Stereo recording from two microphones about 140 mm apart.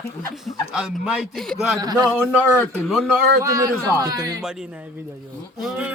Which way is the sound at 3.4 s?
25° right (ahead or behind).